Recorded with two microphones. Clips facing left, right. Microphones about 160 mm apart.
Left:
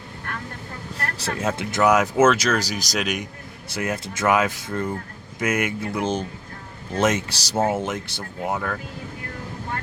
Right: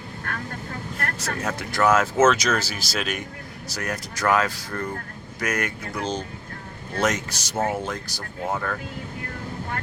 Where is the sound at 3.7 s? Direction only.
25° left (ahead or behind).